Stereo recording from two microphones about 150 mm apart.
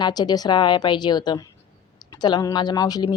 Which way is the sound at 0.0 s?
25° left (ahead or behind).